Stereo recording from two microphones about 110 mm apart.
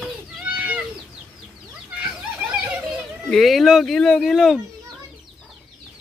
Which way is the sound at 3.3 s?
Centre (ahead or behind).